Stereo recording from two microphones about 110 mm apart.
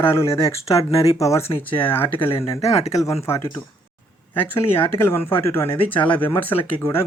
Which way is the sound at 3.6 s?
20° left (ahead or behind).